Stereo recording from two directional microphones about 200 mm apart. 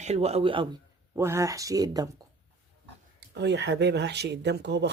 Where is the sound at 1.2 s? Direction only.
15° right (ahead or behind).